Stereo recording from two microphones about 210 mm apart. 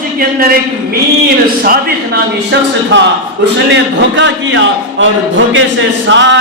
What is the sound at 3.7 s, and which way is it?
A man's voice, 60° right (ahead or behind).